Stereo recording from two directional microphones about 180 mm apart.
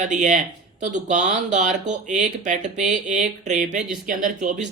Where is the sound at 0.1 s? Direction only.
40° right (ahead or behind).